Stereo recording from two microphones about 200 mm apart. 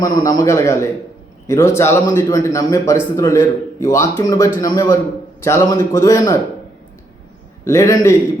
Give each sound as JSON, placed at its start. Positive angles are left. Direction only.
{"t": 0.0, "sound": "a man's voice", "side_deg": 20}
{"t": 7.6, "sound": "a man's voice", "side_deg": 15}